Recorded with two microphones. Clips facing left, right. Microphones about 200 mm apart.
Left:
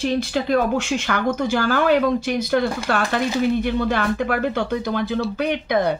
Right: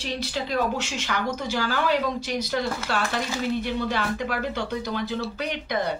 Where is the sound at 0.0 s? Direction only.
50° left (ahead or behind).